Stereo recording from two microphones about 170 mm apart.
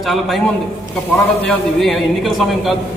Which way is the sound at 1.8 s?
Centre (ahead or behind).